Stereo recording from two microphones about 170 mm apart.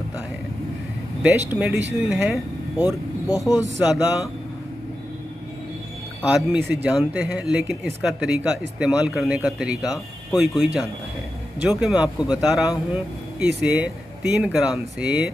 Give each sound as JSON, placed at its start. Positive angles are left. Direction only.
{"t": 1.2, "sound": "speech", "side_deg": -10}
{"t": 3.3, "sound": "a man's voice", "side_deg": 20}
{"t": 3.8, "sound": "speech", "side_deg": -10}
{"t": 6.5, "sound": "speech", "side_deg": -10}